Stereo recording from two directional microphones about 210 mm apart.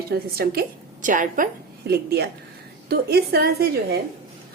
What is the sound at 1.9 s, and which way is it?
A woman's voice, 50° right (ahead or behind).